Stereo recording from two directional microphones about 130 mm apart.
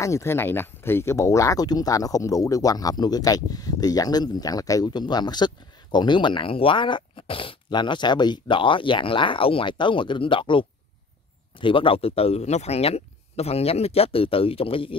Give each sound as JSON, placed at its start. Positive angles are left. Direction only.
{"t": 0.0, "sound": "speech", "side_deg": 20}